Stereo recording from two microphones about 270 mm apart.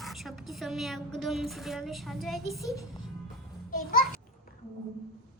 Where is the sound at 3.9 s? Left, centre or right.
Left.